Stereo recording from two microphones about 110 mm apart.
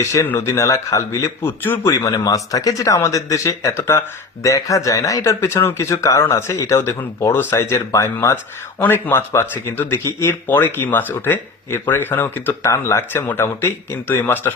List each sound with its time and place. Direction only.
0.0 s speech: 25° left (ahead or behind)
1.9 s speech: 30° left (ahead or behind)